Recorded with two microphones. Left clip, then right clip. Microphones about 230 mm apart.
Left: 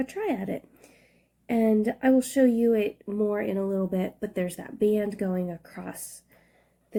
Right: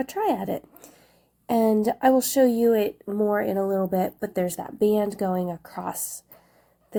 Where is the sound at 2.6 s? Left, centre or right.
Centre.